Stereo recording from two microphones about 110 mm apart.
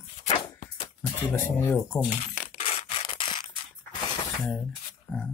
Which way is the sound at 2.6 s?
60° left (ahead or behind).